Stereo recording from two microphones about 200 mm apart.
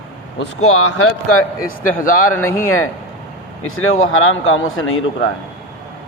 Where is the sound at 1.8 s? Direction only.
45° left (ahead or behind).